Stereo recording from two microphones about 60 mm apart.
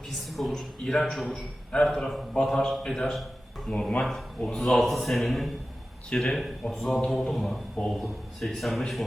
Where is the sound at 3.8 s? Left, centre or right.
Centre.